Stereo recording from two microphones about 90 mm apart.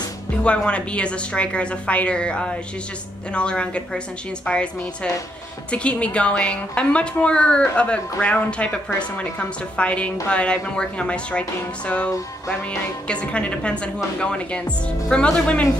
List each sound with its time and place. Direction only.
0.4 s a woman's voice: 15° left (ahead or behind)